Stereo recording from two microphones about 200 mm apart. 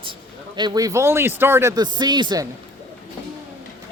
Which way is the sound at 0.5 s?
20° right (ahead or behind).